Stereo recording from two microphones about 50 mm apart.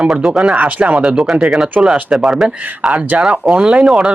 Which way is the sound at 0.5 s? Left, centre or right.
Right.